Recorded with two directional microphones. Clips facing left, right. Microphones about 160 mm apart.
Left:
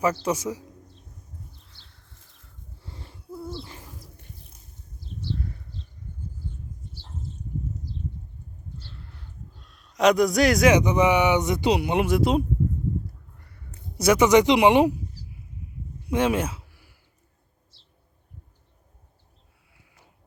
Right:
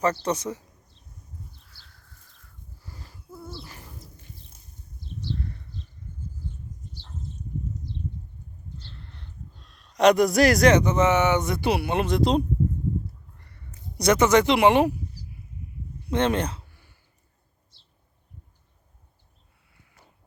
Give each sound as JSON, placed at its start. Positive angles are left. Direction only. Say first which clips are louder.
{"t": 0.0, "sound": "speech", "louder": "left 1 dB", "side_deg": 10}
{"t": 1.6, "sound": "a sound", "louder": "left 1 dB", "side_deg": 25}
{"t": 2.7, "sound": "wheeze", "louder": "left 2 dB", "side_deg": 25}
{"t": 3.6, "sound": "owl", "louder": "left 3 dB", "side_deg": 20}
{"t": 8.8, "sound": "livestock", "louder": "even", "side_deg": 5}
{"t": 9.6, "sound": "a man's voice", "louder": "right 2 dB", "side_deg": 0}
{"t": 10.8, "sound": "speech", "louder": "left 1 dB", "side_deg": 15}
{"t": 14.0, "sound": "speech", "louder": "left 2 dB", "side_deg": 10}
{"t": 16.0, "sound": "a sound", "louder": "left 1 dB", "side_deg": 10}